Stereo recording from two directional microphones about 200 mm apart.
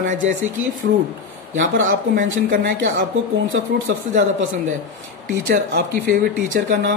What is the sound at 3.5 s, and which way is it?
Speech, 65° right (ahead or behind).